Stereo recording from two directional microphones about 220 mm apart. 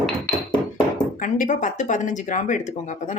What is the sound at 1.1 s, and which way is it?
Speech, 35° left (ahead or behind).